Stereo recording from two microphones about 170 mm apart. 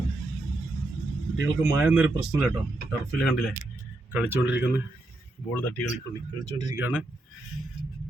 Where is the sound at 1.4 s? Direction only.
10° right (ahead or behind).